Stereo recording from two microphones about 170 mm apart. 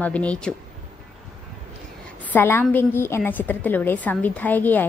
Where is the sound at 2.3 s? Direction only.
10° left (ahead or behind).